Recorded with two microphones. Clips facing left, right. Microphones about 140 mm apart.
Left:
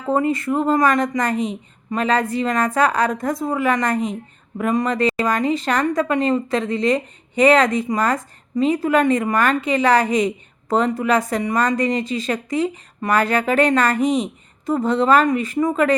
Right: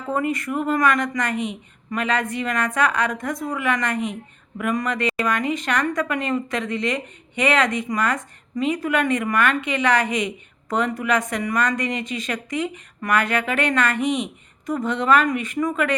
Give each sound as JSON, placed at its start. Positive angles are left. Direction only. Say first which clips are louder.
{"t": 0.1, "sound": "a woman's voice", "louder": "left 5 dB", "side_deg": 30}